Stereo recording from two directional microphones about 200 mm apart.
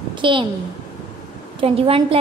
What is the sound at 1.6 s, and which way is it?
Speech, 30° right (ahead or behind).